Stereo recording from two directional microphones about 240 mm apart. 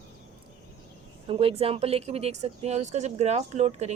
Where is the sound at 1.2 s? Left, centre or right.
Right.